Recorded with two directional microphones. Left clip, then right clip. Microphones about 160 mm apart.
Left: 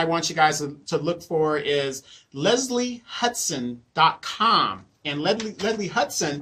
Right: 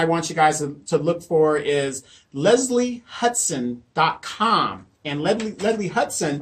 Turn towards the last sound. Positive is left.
turn(degrees=20)  # may be behind; listen again after turning